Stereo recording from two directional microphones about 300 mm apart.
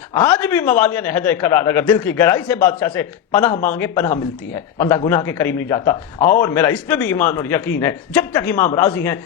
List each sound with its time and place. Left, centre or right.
0.1 s a man's voice: centre
6.1 s speech: left
6.4 s a man's voice: centre